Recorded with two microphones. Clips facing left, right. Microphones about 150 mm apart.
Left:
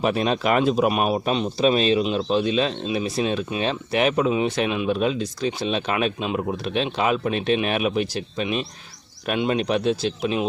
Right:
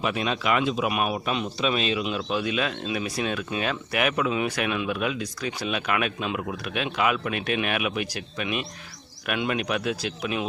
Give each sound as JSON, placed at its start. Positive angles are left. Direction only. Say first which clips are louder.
{"t": 0.0, "sound": "speech", "louder": "left 5 dB", "side_deg": 40}